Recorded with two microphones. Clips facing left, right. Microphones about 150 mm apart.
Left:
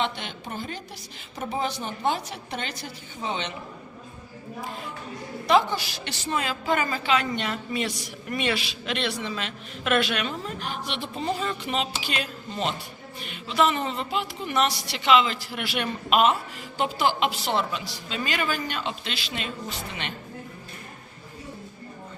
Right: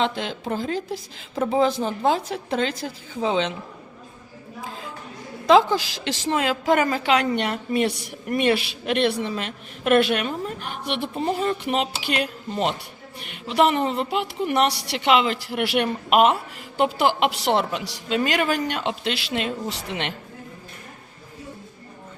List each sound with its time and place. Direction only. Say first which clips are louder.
0.0 s a woman's voice: right 5 dB; 90° right
5.5 s a woman's voice: right 1 dB; 90° right; by 20.1 s 75° right (ahead or behind)